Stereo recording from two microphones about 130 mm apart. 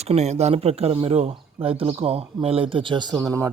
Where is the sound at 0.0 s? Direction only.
55° right (ahead or behind).